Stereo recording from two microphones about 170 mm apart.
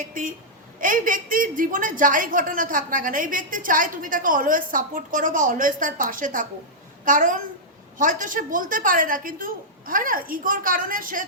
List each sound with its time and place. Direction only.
0.0 s a woman's voice: 50° right (ahead or behind)